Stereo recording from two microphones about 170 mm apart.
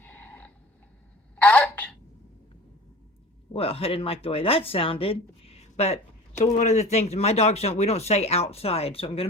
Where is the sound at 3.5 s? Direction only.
35° left (ahead or behind).